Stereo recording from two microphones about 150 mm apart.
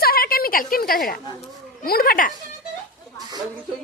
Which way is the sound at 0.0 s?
80° left.